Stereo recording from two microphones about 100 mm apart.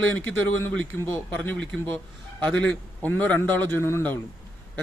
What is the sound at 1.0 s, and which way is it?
A man's voice, 20° left (ahead or behind).